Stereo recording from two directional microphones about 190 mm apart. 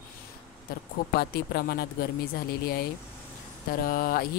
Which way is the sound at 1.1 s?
55° left (ahead or behind).